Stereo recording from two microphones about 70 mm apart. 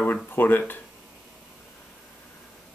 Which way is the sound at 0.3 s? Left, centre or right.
Left.